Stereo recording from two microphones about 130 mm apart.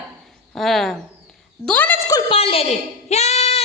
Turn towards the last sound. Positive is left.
turn(degrees=50)  # may be behind; listen again after turning